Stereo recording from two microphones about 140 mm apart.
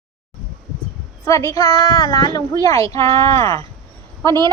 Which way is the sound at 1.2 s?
20° left (ahead or behind).